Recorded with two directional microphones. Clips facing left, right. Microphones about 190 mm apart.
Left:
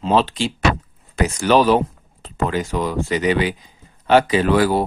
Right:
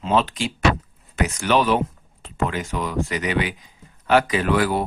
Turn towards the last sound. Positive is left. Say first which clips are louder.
# left 4 dB
turn(degrees=35)  # may be behind; listen again after turning